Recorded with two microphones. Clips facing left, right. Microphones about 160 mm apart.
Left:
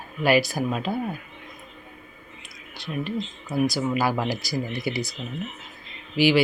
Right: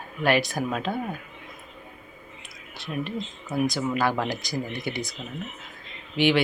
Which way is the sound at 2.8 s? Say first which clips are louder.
Left 2 dB; centre (ahead or behind).